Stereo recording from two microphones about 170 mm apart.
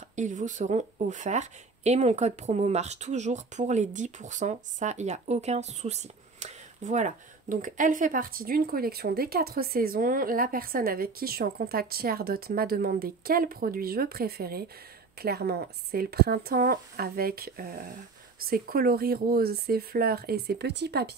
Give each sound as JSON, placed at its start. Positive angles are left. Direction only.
{"t": 0.1, "sound": "speech", "side_deg": -45}